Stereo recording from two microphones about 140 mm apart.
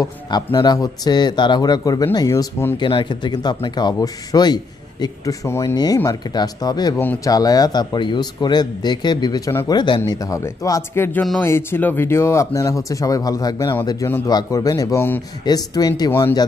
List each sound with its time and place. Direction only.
0.0 s speech: 25° left (ahead or behind)
2.9 s a man's voice: 35° left (ahead or behind)
11.1 s speech: 5° left (ahead or behind)
15.4 s speech: 25° left (ahead or behind)
16.1 s speech: 15° left (ahead or behind)